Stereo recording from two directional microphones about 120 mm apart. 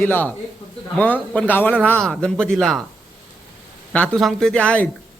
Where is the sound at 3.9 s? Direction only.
10° left (ahead or behind).